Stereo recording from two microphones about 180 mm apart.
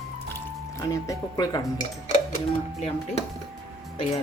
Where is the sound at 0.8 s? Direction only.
20° left (ahead or behind).